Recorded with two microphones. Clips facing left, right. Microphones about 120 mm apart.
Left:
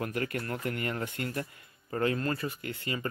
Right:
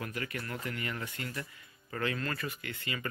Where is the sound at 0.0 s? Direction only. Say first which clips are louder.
Left 6 dB; 45° left (ahead or behind).